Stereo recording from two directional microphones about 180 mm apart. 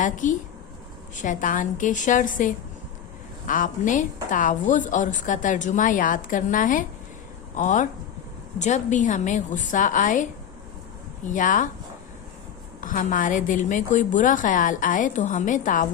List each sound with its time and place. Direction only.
0.0 s a woman's voice: 45° left (ahead or behind)
11.3 s a woman's voice: 45° left (ahead or behind)
12.8 s a woman's voice: 45° left (ahead or behind)